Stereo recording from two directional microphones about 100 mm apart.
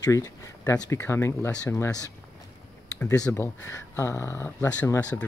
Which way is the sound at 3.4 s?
25° left (ahead or behind).